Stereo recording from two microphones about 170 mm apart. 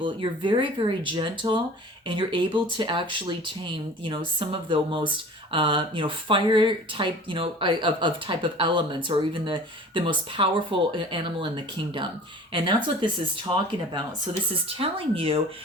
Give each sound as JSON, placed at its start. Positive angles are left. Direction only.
{"t": 0.0, "sound": "speech", "side_deg": -30}
{"t": 14.5, "sound": "speech", "side_deg": -35}